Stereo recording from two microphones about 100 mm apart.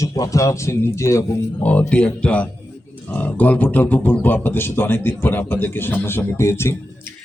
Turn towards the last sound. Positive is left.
turn(degrees=25)  # may be behind; listen again after turning